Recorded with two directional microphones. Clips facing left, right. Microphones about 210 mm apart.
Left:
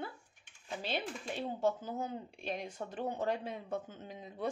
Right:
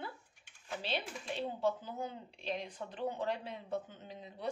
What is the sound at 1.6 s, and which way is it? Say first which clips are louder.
Speech: left 3 dB; 45° left (ahead or behind).